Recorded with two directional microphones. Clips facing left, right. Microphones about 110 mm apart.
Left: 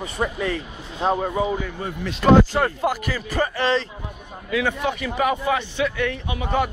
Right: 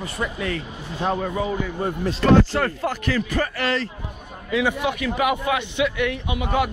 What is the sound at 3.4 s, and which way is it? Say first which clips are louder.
Speech: left 3 dB; 25° left (ahead or behind).